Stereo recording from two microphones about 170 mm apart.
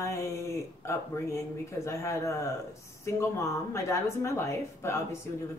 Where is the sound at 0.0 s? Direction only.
15° left (ahead or behind).